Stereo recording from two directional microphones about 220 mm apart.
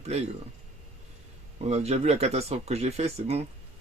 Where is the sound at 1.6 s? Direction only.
30° right (ahead or behind).